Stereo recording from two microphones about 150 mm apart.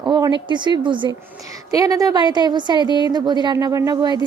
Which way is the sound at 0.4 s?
30° right (ahead or behind).